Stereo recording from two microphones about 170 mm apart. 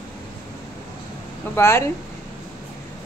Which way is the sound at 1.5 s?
15° left (ahead or behind).